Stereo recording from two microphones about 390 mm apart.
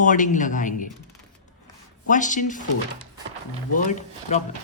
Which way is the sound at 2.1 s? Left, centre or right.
Centre.